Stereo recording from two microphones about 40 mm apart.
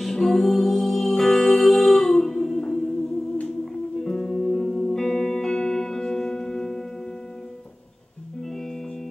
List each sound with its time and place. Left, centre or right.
0.0 s music: centre
4.0 s music: centre
5.3 s music: centre